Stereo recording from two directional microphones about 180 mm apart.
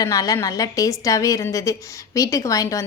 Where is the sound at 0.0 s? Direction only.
20° left (ahead or behind).